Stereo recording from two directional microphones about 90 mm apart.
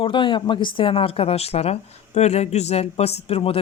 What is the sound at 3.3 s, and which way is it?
Speech, 90° left.